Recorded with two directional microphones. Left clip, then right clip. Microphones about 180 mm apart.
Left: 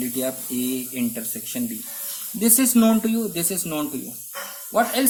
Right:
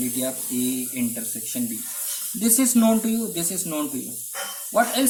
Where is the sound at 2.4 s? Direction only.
40° left (ahead or behind).